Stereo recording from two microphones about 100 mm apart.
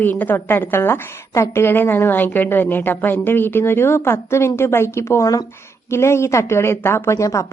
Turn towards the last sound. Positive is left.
turn(degrees=30)  # may be behind; listen again after turning